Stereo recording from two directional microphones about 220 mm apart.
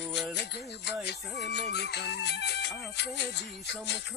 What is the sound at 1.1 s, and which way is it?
Music, 50° left (ahead or behind).